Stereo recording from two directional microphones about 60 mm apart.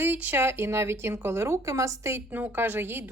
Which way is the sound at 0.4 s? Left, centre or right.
Right.